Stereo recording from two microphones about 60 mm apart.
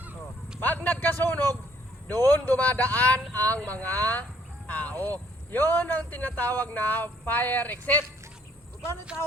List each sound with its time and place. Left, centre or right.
0.6 s speech: left